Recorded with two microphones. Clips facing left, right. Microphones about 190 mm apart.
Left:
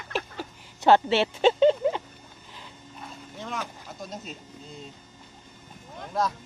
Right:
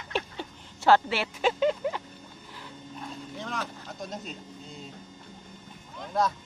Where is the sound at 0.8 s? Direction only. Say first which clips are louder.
Left 3 dB; 25° left (ahead or behind).